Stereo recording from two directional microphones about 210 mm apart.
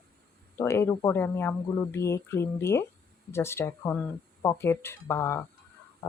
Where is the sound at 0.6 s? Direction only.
10° left (ahead or behind).